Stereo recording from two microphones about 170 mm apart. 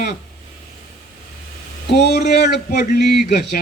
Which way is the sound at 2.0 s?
70° left (ahead or behind).